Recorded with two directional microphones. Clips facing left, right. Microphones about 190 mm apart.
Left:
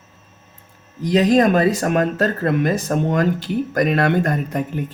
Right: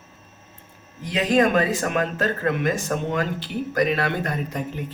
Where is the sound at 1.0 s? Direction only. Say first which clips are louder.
Left 5 dB; 40° left (ahead or behind).